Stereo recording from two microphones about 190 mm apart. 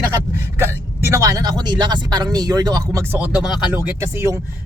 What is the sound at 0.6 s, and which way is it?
Speech, 15° right (ahead or behind).